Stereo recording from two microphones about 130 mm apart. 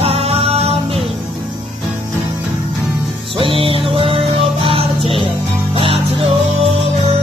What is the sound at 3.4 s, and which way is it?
Music, 45° right (ahead or behind).